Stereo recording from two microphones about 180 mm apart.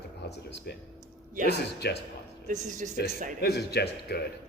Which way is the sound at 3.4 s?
65° left (ahead or behind).